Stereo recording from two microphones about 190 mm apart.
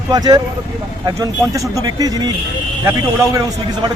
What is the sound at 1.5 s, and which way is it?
Speech, 15° right (ahead or behind).